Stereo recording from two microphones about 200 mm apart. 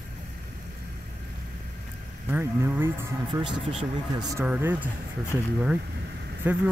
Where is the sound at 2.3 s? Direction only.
10° right (ahead or behind).